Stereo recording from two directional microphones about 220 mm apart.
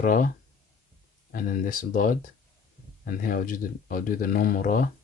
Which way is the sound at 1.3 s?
40° left (ahead or behind).